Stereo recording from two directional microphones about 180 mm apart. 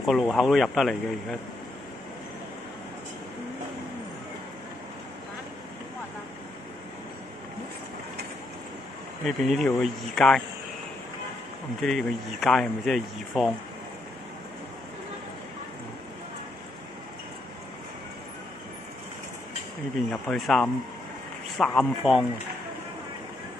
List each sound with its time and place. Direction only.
0.0 s speech: centre (ahead or behind)
9.2 s speech: centre (ahead or behind)
11.8 s speech: centre (ahead or behind)
20.1 s speech: 5° left (ahead or behind)